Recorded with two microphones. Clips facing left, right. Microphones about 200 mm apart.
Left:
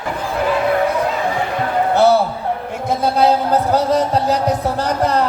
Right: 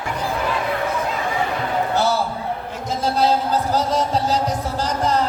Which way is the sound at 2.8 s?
60° left (ahead or behind).